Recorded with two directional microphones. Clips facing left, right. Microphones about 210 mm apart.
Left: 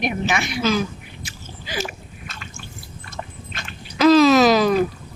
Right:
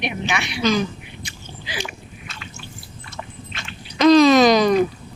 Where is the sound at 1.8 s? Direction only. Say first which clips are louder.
Left 2 dB; 45° left (ahead or behind).